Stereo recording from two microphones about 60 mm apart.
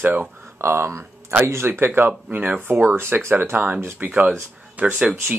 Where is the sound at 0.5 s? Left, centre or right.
Right.